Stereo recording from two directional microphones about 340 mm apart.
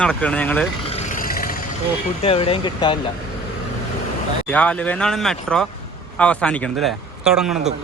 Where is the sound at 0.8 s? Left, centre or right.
Left.